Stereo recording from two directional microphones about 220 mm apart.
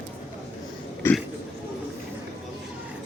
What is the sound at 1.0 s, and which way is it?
Speech, 10° left (ahead or behind).